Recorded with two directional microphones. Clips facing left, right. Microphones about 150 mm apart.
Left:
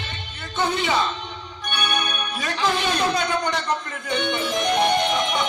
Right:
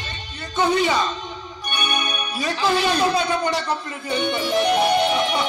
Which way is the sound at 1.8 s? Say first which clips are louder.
Even; 10° right (ahead or behind).